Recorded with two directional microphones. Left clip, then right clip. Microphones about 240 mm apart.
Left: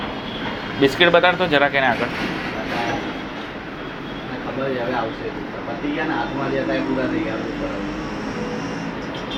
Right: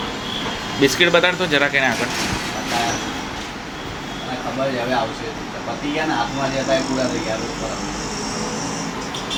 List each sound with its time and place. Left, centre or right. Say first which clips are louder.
0.8 s speech: left 1 dB; centre